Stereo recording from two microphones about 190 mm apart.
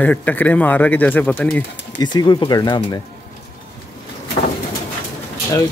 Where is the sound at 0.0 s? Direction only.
10° left (ahead or behind).